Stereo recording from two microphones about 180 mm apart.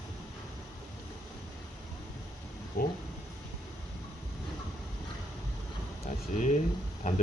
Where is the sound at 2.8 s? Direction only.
55° left (ahead or behind).